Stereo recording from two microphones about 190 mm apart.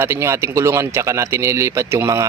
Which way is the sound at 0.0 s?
15° right (ahead or behind).